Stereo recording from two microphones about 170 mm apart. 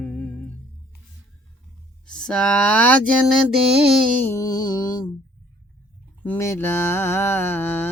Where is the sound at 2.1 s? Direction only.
5° left (ahead or behind).